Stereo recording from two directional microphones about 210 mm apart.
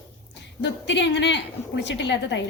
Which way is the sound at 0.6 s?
55° left (ahead or behind).